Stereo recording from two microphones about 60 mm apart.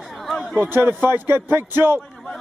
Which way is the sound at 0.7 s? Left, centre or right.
Right.